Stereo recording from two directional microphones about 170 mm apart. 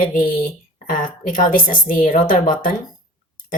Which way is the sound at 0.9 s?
50° left (ahead or behind).